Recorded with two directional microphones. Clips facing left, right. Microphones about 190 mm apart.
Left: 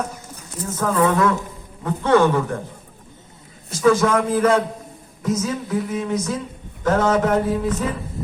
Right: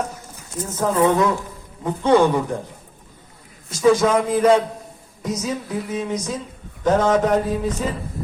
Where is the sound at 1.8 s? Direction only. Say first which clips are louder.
Right 1 dB; 15° right (ahead or behind).